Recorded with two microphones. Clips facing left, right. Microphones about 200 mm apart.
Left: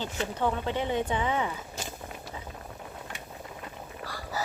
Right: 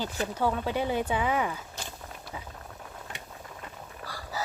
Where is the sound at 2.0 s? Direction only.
10° left (ahead or behind).